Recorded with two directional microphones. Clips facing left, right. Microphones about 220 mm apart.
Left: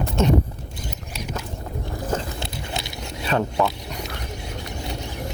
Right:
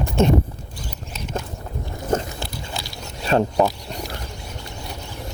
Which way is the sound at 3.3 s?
35° right (ahead or behind).